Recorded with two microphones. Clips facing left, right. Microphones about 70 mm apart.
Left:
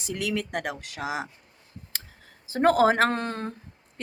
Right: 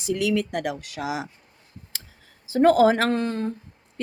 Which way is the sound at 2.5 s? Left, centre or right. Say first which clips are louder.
Right 3 dB; left.